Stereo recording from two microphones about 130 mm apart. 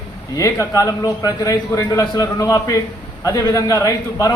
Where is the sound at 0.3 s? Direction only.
25° left (ahead or behind).